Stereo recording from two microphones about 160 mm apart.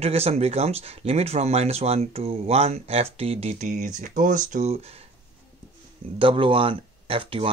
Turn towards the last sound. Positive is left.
turn(degrees=-35)  # may be behind; listen again after turning